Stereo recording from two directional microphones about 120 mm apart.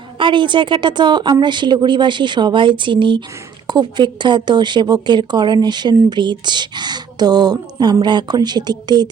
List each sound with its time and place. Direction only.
0.2 s speech: 40° right (ahead or behind)